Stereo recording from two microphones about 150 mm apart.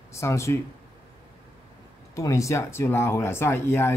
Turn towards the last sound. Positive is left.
turn(degrees=15)  # may be behind; listen again after turning